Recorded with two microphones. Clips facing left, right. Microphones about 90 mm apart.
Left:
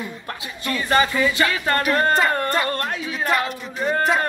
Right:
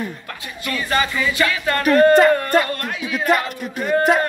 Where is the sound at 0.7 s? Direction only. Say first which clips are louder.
Left 2 dB; 30° left (ahead or behind).